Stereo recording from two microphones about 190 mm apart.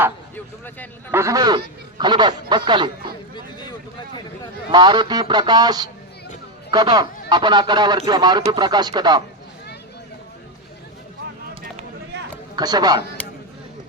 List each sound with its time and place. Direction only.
0.3 s speech: 10° left (ahead or behind)
1.1 s speech: 15° right (ahead or behind)
3.3 s a sound: 25° left (ahead or behind)
4.7 s speech: 20° right (ahead or behind)
12.1 s a sound: 60° right (ahead or behind)
12.5 s speech: 20° right (ahead or behind)